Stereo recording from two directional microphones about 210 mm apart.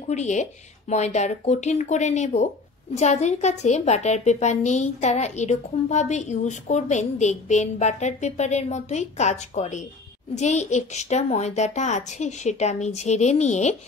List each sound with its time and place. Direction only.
0.1 s a woman's voice: 35° left (ahead or behind)